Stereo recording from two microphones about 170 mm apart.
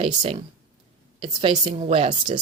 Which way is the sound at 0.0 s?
35° right (ahead or behind).